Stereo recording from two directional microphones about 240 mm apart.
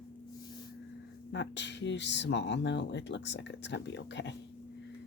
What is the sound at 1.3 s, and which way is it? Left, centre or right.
Speech, left.